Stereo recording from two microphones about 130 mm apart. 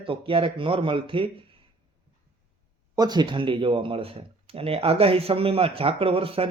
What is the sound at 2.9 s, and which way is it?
Speech, 30° right (ahead or behind).